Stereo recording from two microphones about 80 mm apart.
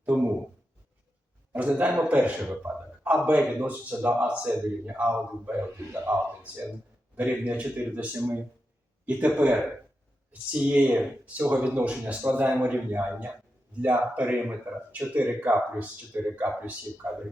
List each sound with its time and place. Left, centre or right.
0.1 s a sound: right
1.5 s speech: centre
8.1 s speech: right
9.0 s speech: centre